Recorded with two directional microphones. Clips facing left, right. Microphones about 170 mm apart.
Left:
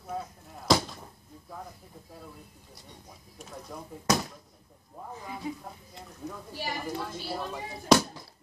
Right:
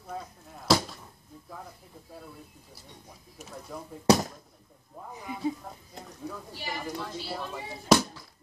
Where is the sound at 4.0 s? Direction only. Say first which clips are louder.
Right 6 dB; 30° right (ahead or behind).